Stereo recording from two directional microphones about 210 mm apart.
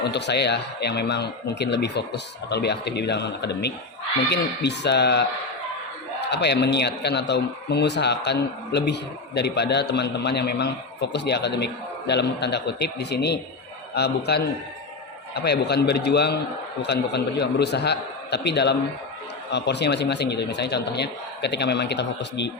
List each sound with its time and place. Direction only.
0.0 s a man's voice: 55° left (ahead or behind)